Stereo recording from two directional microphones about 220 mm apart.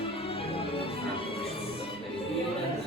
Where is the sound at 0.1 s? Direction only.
25° left (ahead or behind).